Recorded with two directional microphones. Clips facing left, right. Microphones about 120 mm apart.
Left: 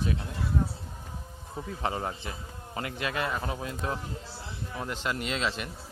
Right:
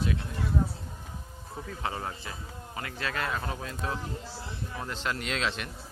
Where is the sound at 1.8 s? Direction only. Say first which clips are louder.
Left 3 dB; 25° left (ahead or behind).